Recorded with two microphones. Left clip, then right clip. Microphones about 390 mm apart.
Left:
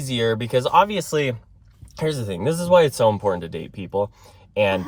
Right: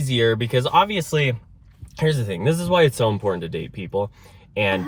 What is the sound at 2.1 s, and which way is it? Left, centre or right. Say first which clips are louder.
Speech: right 1 dB; centre.